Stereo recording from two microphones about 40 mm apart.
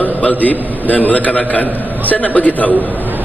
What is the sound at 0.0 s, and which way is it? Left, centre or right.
A man's voice, left.